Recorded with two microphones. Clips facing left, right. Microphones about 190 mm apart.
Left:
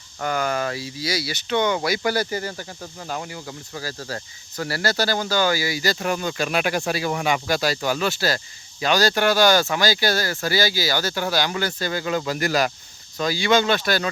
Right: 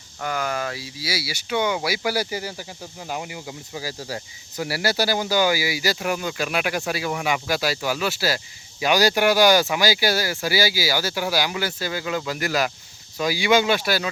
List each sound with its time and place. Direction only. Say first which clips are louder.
0.3 s speech: left 3 dB; 5° right (ahead or behind)
6.3 s speech: left 2 dB; 35° left (ahead or behind)
7.4 s speech: left 1 dB; 5° right (ahead or behind)
12.0 s speech: left 3 dB; 40° left (ahead or behind)
13.1 s speech: even; 10° right (ahead or behind)